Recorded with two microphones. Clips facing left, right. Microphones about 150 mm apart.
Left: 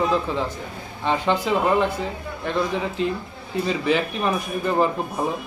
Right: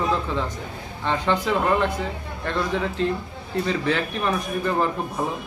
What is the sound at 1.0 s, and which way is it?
Speech, 15° left (ahead or behind).